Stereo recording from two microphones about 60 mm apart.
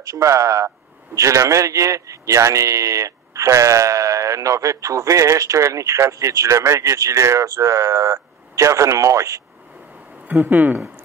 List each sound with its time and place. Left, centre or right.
0.0 s a man's voice: right
10.2 s speech: right